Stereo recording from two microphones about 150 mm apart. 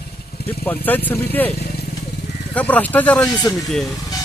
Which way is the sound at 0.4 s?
90° left.